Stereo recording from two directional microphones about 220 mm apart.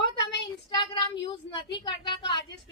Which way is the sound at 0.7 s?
20° left (ahead or behind).